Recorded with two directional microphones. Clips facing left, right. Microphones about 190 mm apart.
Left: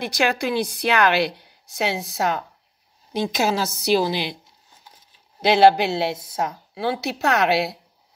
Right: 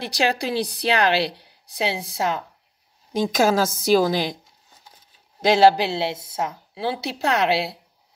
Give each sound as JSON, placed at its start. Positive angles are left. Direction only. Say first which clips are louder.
{"t": 0.0, "sound": "a woman's voice", "louder": "left 1 dB", "side_deg": -35}
{"t": 3.1, "sound": "a woman's voice", "louder": "right 3 dB", "side_deg": -45}
{"t": 5.4, "sound": "a woman's voice", "louder": "left 1 dB", "side_deg": -40}